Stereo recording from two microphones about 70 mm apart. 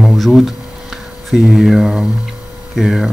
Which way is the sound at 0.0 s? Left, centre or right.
Centre.